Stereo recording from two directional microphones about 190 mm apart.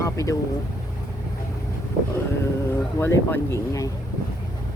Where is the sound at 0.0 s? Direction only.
15° left (ahead or behind).